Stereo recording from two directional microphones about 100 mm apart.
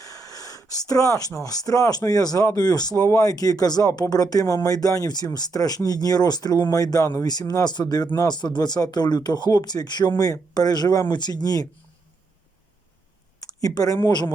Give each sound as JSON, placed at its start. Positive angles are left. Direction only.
{"t": 0.0, "sound": "speech", "side_deg": 35}
{"t": 13.5, "sound": "speech", "side_deg": 40}